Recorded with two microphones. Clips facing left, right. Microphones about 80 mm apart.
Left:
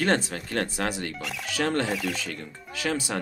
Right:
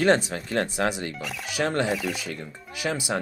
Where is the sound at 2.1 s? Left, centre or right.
Centre.